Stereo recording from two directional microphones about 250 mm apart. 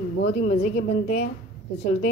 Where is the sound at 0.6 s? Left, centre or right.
Left.